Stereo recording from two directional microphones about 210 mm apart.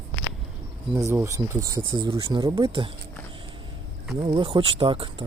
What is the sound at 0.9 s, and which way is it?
Speech, 15° right (ahead or behind).